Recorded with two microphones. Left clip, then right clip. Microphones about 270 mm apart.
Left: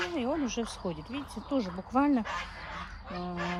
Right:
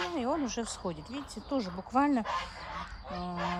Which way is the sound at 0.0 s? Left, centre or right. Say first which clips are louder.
Left 1 dB; right.